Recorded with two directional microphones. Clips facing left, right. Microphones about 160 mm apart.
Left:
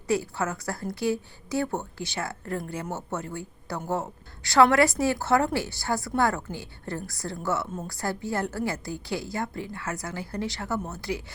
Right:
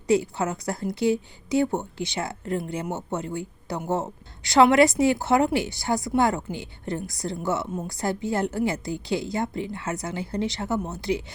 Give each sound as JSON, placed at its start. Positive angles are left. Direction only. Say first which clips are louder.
{"t": 0.1, "sound": "speech", "louder": "right 4 dB", "side_deg": -20}